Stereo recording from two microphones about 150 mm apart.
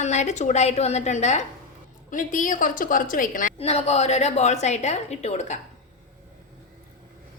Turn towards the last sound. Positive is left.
turn(degrees=50)  # may be behind; listen again after turning